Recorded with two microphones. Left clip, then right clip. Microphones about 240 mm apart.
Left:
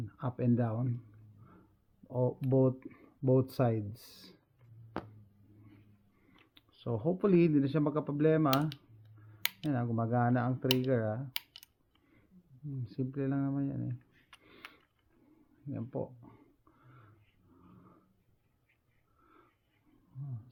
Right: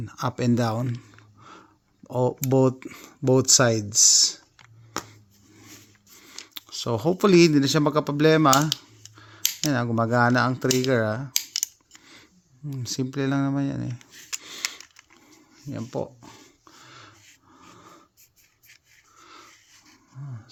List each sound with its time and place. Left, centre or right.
0.0 s speech: right
2.0 s speech: right
6.5 s speech: right
12.8 s speech: right
15.7 s a sound: right